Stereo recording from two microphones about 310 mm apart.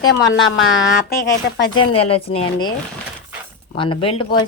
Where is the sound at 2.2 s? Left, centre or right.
Centre.